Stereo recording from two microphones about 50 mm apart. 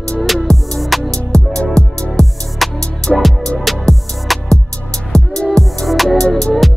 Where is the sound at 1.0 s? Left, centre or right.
Centre.